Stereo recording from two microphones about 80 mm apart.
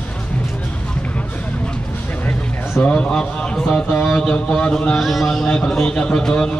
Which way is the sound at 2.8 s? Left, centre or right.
Centre.